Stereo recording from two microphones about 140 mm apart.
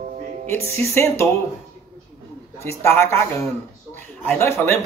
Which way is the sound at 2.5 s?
15° left (ahead or behind).